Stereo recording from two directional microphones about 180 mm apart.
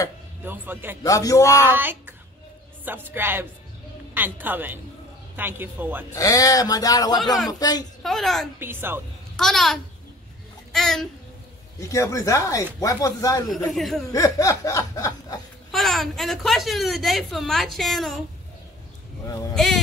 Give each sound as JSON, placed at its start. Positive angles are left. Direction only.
{"t": 0.4, "sound": "speech", "side_deg": -10}
{"t": 1.0, "sound": "speech", "side_deg": 20}
{"t": 1.7, "sound": "child singing", "side_deg": -10}
{"t": 2.8, "sound": "speech", "side_deg": -10}
{"t": 6.1, "sound": "chuckle", "side_deg": 20}
{"t": 8.0, "sound": "a woman's voice", "side_deg": 0}
{"t": 8.5, "sound": "speech", "side_deg": -10}
{"t": 9.4, "sound": "a woman's voice", "side_deg": 0}
{"t": 11.8, "sound": "speech", "side_deg": 15}
{"t": 12.8, "sound": "chuckle", "side_deg": 20}
{"t": 13.6, "sound": "a woman's voice", "side_deg": 0}
{"t": 14.1, "sound": "chuckle", "side_deg": 20}
{"t": 15.7, "sound": "a woman's voice", "side_deg": 0}
{"t": 19.5, "sound": "a woman's voice", "side_deg": 0}